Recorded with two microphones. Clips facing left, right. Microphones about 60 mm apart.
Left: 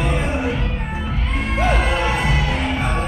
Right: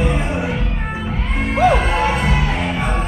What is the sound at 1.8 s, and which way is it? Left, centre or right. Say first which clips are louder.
Music: right 2 dB; right.